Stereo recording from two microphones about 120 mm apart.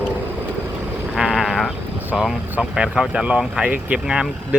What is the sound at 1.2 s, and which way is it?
Sheep, centre (ahead or behind).